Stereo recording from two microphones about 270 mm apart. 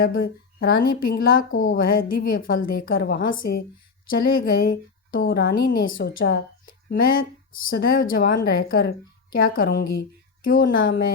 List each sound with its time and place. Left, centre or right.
0.0 s speech: left
5.9 s a woman's voice: left